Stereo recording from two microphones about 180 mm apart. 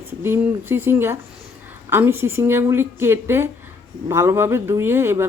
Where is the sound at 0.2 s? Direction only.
15° right (ahead or behind).